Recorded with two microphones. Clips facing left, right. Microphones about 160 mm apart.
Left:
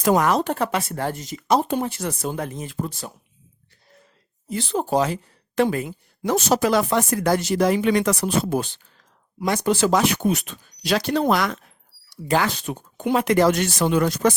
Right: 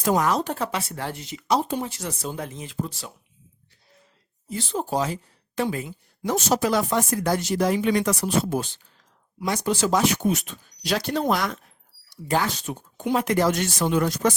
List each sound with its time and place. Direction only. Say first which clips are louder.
0.0 s speech: left 3 dB; 65° left (ahead or behind); by 3.1 s 50° left (ahead or behind)
4.4 s speech: left 4 dB; 70° left (ahead or behind)